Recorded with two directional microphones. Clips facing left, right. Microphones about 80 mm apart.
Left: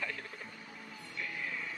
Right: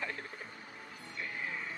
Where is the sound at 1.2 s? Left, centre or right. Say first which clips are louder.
Even; right.